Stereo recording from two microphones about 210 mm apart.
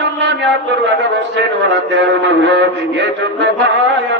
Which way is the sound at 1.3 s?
60° right (ahead or behind).